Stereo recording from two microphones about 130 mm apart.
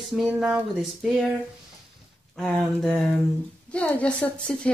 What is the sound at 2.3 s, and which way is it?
A woman's voice, 5° left (ahead or behind).